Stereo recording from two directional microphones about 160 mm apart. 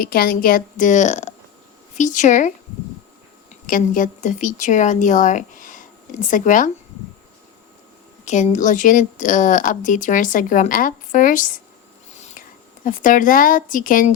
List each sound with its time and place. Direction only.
0.0 s a woman's voice: 65° left (ahead or behind)
3.5 s a woman's voice: 55° left (ahead or behind)
8.2 s a woman's voice: 50° left (ahead or behind)
12.1 s whispering: 45° left (ahead or behind)
12.8 s speech: 55° left (ahead or behind)